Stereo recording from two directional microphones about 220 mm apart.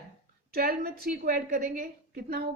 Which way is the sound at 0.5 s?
45° right (ahead or behind).